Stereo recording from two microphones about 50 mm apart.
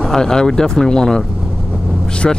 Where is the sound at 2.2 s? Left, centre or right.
Centre.